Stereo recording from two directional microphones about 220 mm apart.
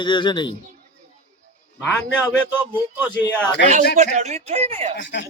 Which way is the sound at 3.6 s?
50° left (ahead or behind).